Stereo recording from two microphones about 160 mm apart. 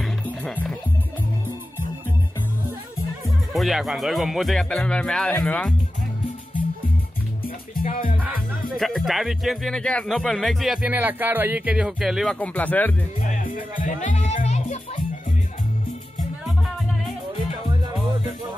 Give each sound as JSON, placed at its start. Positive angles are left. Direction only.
{"t": 0.0, "sound": "music", "side_deg": 5}
{"t": 3.3, "sound": "speech", "side_deg": 0}
{"t": 7.8, "sound": "music", "side_deg": 60}
{"t": 8.2, "sound": "speech", "side_deg": 0}
{"t": 12.4, "sound": "speech", "side_deg": 10}
{"t": 13.3, "sound": "speech", "side_deg": 60}